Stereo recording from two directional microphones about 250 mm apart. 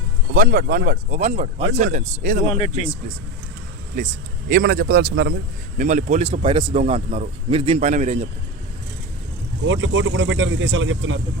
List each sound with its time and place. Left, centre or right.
0.3 s a man's voice: right
5.7 s a man's voice: right
9.6 s speech: right